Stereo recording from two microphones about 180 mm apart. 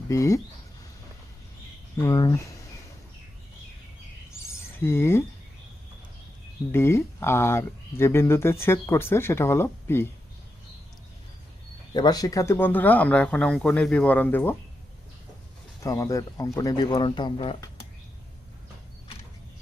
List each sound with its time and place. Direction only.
0.1 s speech: 15° left (ahead or behind)
2.0 s speech: 20° left (ahead or behind)
4.4 s a sound: 15° left (ahead or behind)
6.7 s speech: 15° left (ahead or behind)
11.9 s speech: 20° left (ahead or behind)
15.8 s speech: 20° left (ahead or behind)